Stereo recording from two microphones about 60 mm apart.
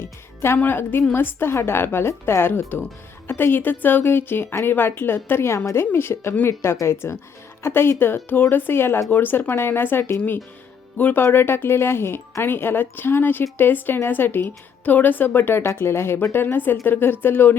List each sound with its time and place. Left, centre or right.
0.0 s a woman's voice: left
5.8 s a woman's voice: left